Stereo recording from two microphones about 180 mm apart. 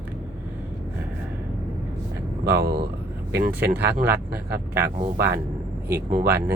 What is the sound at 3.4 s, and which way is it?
Speech, 10° right (ahead or behind).